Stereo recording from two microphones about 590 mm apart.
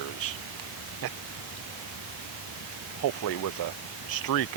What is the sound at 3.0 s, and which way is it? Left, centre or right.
Speech, left.